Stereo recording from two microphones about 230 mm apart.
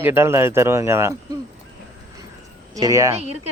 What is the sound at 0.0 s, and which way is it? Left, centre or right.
Speech, centre.